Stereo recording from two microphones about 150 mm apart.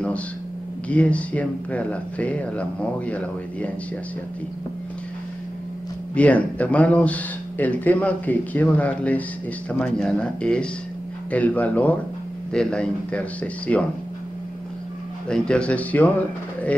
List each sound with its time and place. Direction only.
0.8 s speech: 10° left (ahead or behind)
6.1 s speech: 10° left (ahead or behind)
15.2 s speech: 5° left (ahead or behind)